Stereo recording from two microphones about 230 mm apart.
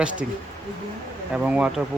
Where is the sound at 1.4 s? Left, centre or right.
Centre.